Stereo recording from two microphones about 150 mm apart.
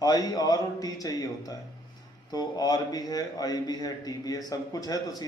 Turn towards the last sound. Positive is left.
turn(degrees=25)  # may be behind; listen again after turning